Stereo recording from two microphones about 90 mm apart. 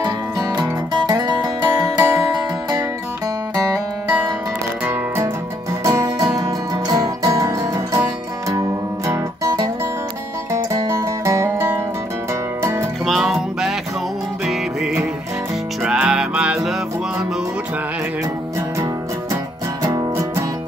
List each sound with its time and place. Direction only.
0.0 s music: 50° right (ahead or behind)
3.5 s music: 35° right (ahead or behind)
5.9 s music: 40° right (ahead or behind)
13.0 s music: centre (ahead or behind)
19.8 s music: 35° right (ahead or behind)